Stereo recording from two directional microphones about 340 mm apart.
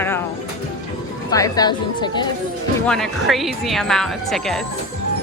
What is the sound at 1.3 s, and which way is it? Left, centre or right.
Speech, centre.